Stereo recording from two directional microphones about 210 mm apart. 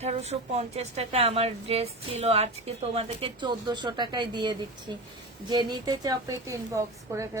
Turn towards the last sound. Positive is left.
turn(degrees=-15)  # may be behind; listen again after turning